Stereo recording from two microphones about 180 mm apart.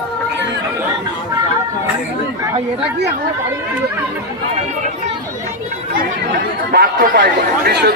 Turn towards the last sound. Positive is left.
turn(degrees=-65)  # may be behind; listen again after turning